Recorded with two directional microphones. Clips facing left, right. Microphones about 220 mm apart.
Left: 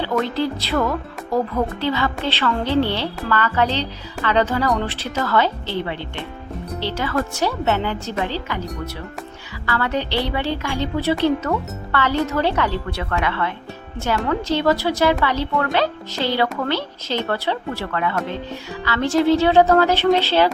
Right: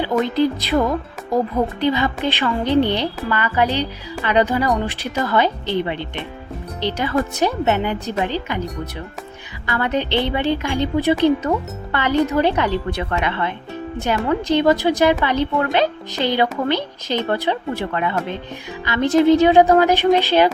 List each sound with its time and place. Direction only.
0.0 s speech: 15° right (ahead or behind)
9.6 s speech: 20° right (ahead or behind)